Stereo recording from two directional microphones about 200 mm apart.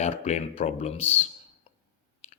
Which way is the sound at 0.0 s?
35° left (ahead or behind).